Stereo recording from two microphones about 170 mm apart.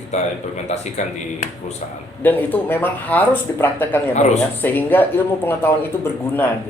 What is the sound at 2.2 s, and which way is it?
Speech, 10° left (ahead or behind).